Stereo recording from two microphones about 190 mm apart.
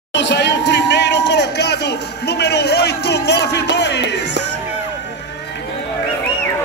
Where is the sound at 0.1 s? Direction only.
65° left (ahead or behind).